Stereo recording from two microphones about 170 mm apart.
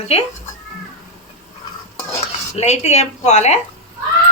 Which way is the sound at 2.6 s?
40° left (ahead or behind).